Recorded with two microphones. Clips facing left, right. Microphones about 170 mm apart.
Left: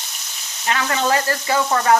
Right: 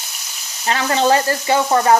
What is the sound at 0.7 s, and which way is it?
Sizzle, 35° right (ahead or behind).